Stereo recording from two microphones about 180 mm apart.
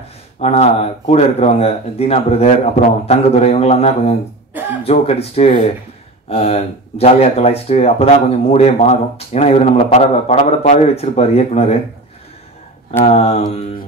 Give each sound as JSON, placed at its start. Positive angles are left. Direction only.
{"t": 0.4, "sound": "speech", "side_deg": 35}
{"t": 13.0, "sound": "speech", "side_deg": 35}